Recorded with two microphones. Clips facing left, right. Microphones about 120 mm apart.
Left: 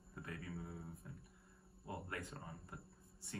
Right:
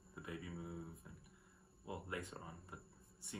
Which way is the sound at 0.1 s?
15° right (ahead or behind).